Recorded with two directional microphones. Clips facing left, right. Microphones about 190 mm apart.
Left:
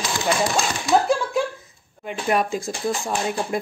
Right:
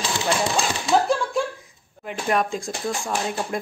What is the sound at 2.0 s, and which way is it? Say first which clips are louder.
Speech: left 1 dB; 5° left (ahead or behind).